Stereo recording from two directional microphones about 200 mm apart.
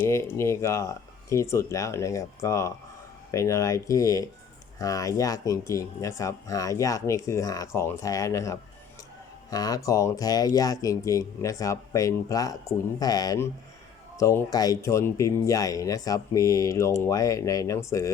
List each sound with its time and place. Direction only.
0.1 s speech: 15° left (ahead or behind)